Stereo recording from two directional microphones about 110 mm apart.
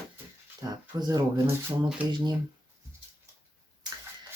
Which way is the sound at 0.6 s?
35° right (ahead or behind).